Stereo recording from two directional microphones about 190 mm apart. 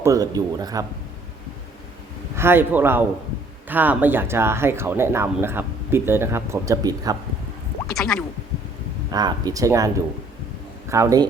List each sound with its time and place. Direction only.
0.0 s speech: 15° right (ahead or behind)
2.3 s speech: 10° right (ahead or behind)
7.9 s speech: 5° left (ahead or behind)
9.0 s a man's voice: 20° right (ahead or behind)